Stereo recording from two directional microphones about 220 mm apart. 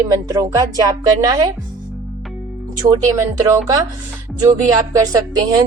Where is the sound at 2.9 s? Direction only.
15° right (ahead or behind).